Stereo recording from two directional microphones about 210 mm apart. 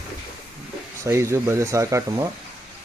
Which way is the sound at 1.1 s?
15° right (ahead or behind).